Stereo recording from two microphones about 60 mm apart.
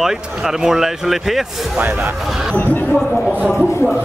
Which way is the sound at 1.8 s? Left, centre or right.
Right.